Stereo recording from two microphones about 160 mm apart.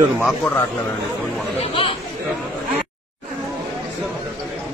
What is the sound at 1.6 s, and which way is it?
Chatter, 35° left (ahead or behind).